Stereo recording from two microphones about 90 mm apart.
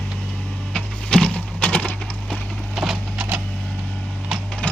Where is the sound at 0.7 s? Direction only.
10° left (ahead or behind).